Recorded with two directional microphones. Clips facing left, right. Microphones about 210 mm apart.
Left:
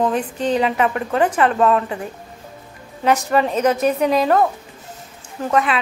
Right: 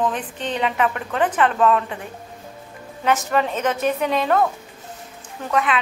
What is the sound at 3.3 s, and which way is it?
A woman's voice, 35° left (ahead or behind).